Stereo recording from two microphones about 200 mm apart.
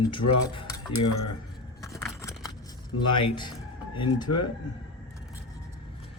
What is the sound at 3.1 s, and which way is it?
Speech, 25° left (ahead or behind).